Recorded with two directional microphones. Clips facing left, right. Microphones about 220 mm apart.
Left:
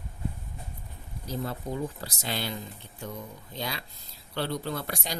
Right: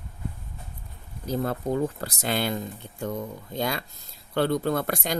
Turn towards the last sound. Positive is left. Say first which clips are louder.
# right 8 dB
turn(degrees=-50)  # may be behind; listen again after turning